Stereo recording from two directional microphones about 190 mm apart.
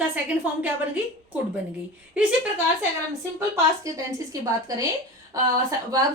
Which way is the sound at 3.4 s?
15° right (ahead or behind).